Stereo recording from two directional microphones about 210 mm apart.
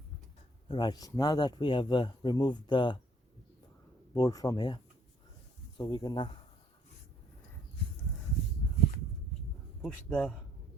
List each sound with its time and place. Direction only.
0.7 s speech: 20° left (ahead or behind)
4.1 s speech: 15° left (ahead or behind)
9.8 s a man's voice: 5° left (ahead or behind)